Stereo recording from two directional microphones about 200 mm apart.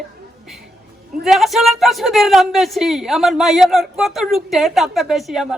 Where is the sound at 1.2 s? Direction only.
Centre (ahead or behind).